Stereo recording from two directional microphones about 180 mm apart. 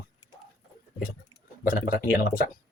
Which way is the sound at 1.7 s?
50° left (ahead or behind).